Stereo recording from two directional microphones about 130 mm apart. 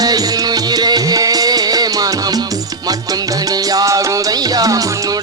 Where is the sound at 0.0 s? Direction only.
30° right (ahead or behind).